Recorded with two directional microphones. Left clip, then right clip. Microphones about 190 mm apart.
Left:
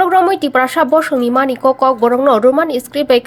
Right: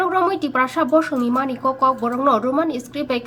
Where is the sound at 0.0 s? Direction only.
25° left (ahead or behind).